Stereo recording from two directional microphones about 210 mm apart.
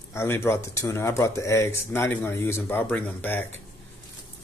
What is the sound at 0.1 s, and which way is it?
Speech, 10° left (ahead or behind).